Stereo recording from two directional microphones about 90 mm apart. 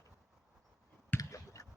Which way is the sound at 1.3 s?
35° left (ahead or behind).